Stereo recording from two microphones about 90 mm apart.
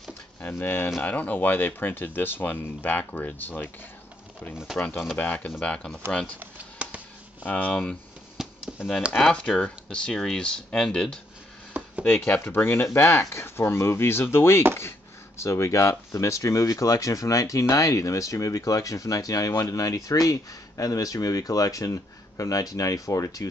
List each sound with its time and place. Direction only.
0.4 s speech: 20° left (ahead or behind)
4.7 s speech: 20° left (ahead or behind)
6.4 s chop: 15° right (ahead or behind)
7.4 s speech: 15° left (ahead or behind)
8.4 s chop: 5° right (ahead or behind)
9.8 s speech: 5° left (ahead or behind)
12.3 s speech: 25° left (ahead or behind); by 23.5 s 40° left (ahead or behind)